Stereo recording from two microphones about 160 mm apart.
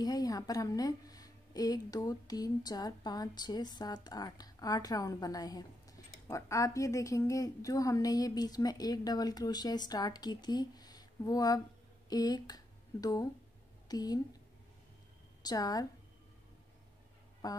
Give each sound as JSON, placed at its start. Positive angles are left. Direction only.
{"t": 0.0, "sound": "a woman's voice", "side_deg": 25}
{"t": 15.4, "sound": "a woman's voice", "side_deg": 25}
{"t": 17.4, "sound": "a woman's voice", "side_deg": 25}